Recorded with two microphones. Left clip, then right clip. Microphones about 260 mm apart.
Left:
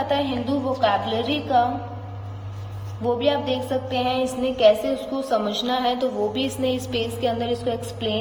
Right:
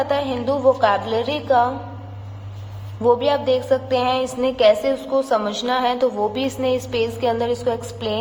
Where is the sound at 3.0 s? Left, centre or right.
Right.